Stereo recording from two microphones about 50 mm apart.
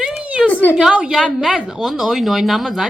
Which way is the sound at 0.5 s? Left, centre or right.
Left.